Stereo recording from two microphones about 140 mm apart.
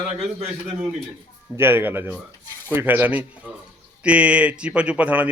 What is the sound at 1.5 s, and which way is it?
Speech, 15° right (ahead or behind).